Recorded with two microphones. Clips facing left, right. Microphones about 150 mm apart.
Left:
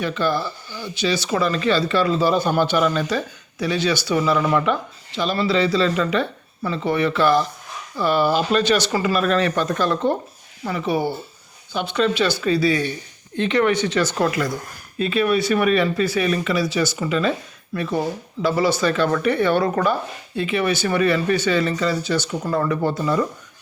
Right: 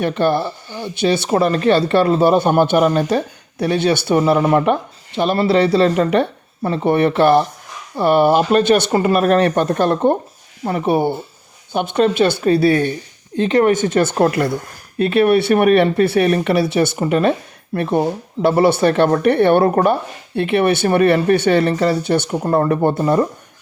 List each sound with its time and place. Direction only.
0.0 s speech: 60° right (ahead or behind)
13.3 s speech: 40° right (ahead or behind)